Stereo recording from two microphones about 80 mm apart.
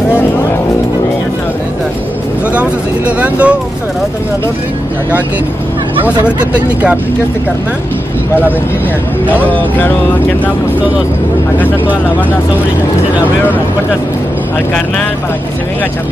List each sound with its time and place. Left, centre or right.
3.2 s speech: centre
6.2 s speech: centre
9.3 s speech: left